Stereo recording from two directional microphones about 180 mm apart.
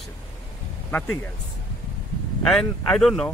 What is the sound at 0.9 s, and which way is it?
Speech, 10° left (ahead or behind).